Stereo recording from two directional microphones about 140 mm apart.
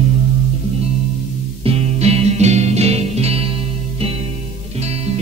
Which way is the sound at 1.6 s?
45° right (ahead or behind).